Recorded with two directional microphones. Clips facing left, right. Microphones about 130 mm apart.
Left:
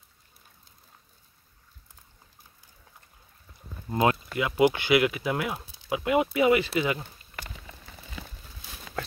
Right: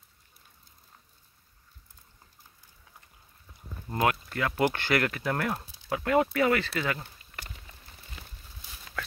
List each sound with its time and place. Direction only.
3.9 s speech: 20° left (ahead or behind)